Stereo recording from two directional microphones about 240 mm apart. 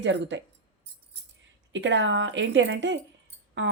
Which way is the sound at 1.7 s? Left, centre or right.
Right.